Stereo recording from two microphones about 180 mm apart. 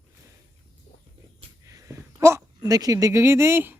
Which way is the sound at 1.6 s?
15° right (ahead or behind).